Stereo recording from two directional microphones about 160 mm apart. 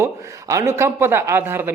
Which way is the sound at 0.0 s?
20° right (ahead or behind).